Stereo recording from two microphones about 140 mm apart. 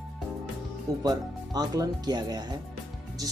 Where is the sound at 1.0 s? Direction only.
25° right (ahead or behind).